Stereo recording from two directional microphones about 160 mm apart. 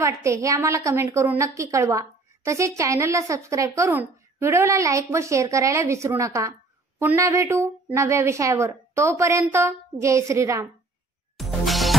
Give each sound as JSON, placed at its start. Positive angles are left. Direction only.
{"t": 0.0, "sound": "a woman's voice", "side_deg": -20}
{"t": 11.3, "sound": "music", "side_deg": 0}